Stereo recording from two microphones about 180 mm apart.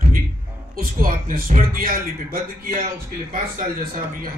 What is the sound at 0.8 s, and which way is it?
A man's voice, 50° right (ahead or behind).